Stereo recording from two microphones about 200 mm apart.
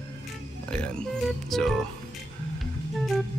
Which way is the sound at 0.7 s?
5° left (ahead or behind).